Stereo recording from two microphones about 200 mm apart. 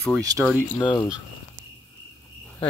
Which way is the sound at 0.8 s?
20° left (ahead or behind).